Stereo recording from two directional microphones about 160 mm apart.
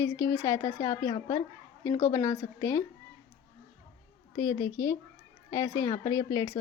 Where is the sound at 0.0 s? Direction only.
20° left (ahead or behind).